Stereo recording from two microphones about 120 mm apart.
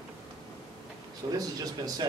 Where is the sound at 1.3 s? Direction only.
30° right (ahead or behind).